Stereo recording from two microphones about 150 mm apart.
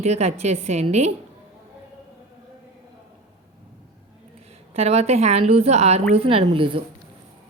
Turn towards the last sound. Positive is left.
turn(degrees=-35)  # may be behind; listen again after turning